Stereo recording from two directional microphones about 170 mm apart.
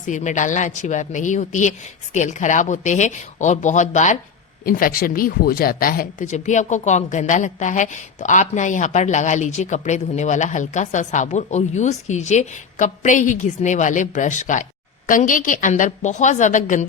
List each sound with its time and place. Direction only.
0.0 s speech: 45° left (ahead or behind)
4.6 s speech: 55° left (ahead or behind)